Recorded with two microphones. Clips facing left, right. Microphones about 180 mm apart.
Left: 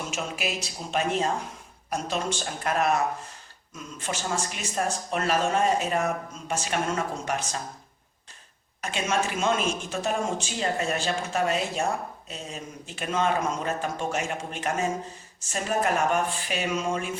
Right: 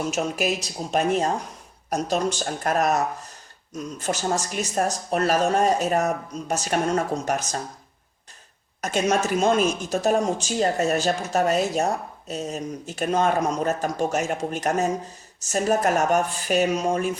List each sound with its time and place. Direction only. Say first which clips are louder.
0.1 s speech: right 7 dB; 40° right (ahead or behind)
8.8 s speech: right 5 dB; 40° right (ahead or behind)